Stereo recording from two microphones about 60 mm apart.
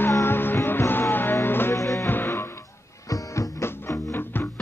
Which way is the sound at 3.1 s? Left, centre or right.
Left.